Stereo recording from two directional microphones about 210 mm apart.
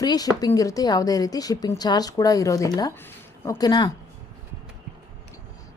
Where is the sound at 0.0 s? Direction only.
20° left (ahead or behind).